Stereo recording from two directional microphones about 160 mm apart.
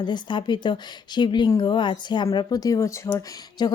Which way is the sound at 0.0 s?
30° left (ahead or behind).